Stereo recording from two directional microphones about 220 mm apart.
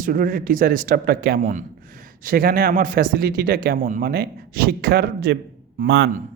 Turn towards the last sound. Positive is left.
turn(degrees=-55)  # may be behind; listen again after turning